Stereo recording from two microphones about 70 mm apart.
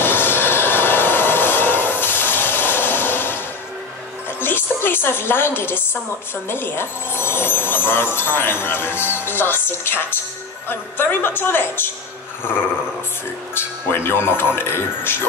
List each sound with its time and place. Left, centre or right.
0.0 s a sound: left
4.4 s music: left
6.5 s speech: left
13.6 s speech: left